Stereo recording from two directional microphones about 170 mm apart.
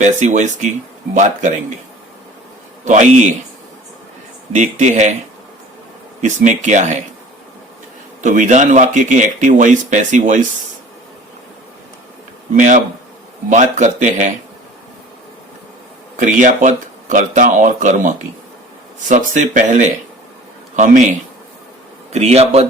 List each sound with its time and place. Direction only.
0.0 s speech: 45° right (ahead or behind)
2.8 s speech: 45° right (ahead or behind)
4.5 s speech: 45° right (ahead or behind)
6.2 s speech: 45° right (ahead or behind)
8.2 s speech: 50° right (ahead or behind)
12.5 s speech: 50° right (ahead or behind)
16.1 s speech: 50° right (ahead or behind)